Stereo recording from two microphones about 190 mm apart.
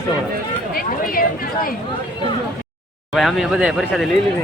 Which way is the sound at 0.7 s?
50° left (ahead or behind).